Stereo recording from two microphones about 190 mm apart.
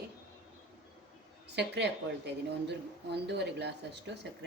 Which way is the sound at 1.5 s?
65° right (ahead or behind).